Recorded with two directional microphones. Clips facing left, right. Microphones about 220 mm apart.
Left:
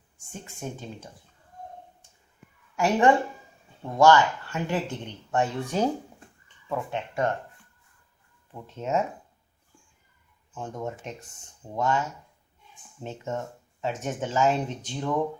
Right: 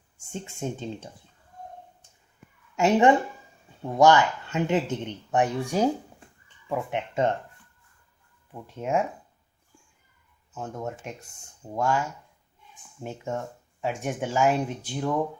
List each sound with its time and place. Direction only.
0.3 s speech: 25° right (ahead or behind)
2.7 s speech: 20° right (ahead or behind)
8.6 s speech: 10° right (ahead or behind)
10.5 s speech: 5° right (ahead or behind)